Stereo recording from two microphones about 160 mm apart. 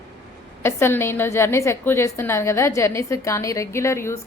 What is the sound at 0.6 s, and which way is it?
A woman's voice, 15° left (ahead or behind).